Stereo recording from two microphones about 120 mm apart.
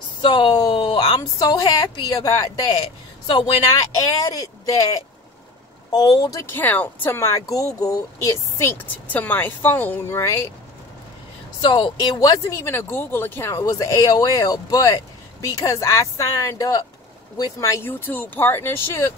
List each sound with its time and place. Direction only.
0.2 s a woman's voice: 40° left (ahead or behind)
4.2 s a woman's voice: 30° left (ahead or behind)
6.4 s speech: 15° left (ahead or behind)
11.6 s speech: 40° left (ahead or behind); by 19.1 s 20° left (ahead or behind)